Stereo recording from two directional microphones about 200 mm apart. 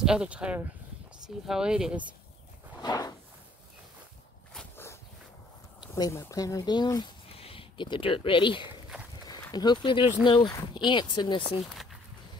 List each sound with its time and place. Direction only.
0.0 s speech: 5° right (ahead or behind)
2.8 s a sound: 20° left (ahead or behind)
4.6 s walk: 10° left (ahead or behind)
5.8 s speech: 20° left (ahead or behind)